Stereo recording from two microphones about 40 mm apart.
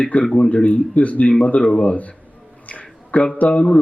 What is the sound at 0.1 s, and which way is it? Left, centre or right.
Speech, left.